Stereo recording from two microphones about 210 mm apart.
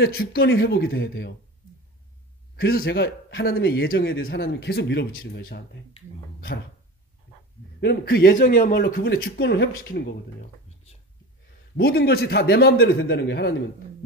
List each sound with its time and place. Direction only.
0.0 s speech: 50° left (ahead or behind)
2.5 s speech: 45° left (ahead or behind)
7.8 s speech: 50° left (ahead or behind)
11.7 s speech: 50° left (ahead or behind)